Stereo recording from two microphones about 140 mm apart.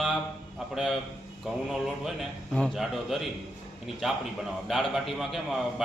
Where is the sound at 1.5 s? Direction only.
Centre (ahead or behind).